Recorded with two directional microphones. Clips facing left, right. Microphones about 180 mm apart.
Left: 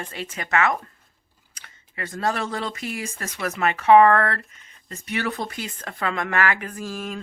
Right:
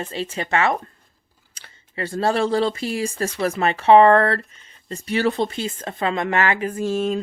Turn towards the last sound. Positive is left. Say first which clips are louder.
# right 10 dB
turn(degrees=-25)  # may be behind; listen again after turning